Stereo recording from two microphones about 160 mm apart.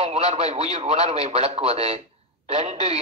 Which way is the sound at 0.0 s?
40° right (ahead or behind).